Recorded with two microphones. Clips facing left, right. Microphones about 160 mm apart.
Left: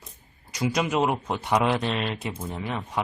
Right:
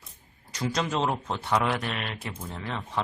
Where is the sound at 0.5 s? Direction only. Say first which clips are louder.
Left 4 dB; 10° left (ahead or behind).